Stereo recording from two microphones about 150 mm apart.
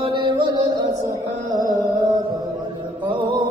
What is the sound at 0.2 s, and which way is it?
Music, 30° right (ahead or behind).